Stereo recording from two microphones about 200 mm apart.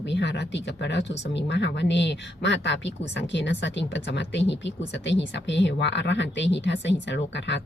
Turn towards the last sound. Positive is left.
turn(degrees=60)  # may be behind; listen again after turning